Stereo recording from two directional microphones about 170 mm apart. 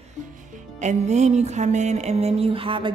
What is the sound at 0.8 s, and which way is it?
Music, 45° right (ahead or behind).